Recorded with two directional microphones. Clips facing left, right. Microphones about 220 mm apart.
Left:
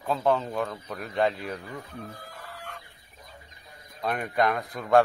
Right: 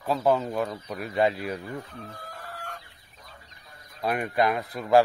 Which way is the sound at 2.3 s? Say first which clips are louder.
Right 2 dB; 45° right (ahead or behind).